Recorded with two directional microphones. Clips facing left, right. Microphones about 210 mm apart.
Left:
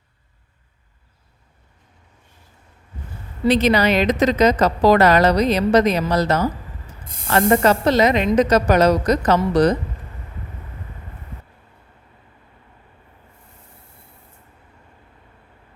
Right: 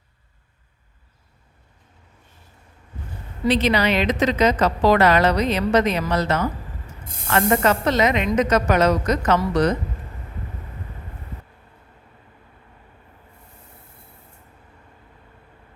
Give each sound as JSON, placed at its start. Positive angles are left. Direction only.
{"t": 3.4, "sound": "a woman's voice", "side_deg": 45}